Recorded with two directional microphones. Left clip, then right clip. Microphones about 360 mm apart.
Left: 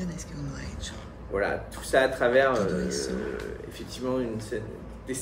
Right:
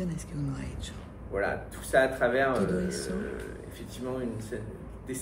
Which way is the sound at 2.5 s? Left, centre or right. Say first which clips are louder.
Left 2 dB; centre.